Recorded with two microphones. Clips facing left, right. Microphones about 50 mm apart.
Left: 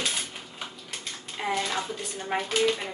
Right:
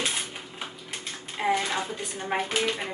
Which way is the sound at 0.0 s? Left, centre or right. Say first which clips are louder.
Right 1 dB; centre.